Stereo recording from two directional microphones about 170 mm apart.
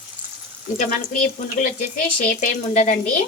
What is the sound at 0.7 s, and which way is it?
Speech, 45° left (ahead or behind).